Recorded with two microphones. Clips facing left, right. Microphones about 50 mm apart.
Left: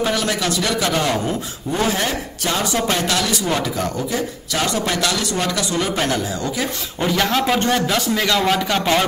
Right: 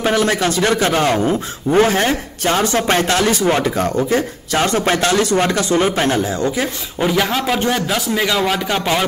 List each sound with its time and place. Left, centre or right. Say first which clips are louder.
0.0 s speech: right 4 dB; right
7.0 s a man's voice: right 2 dB; centre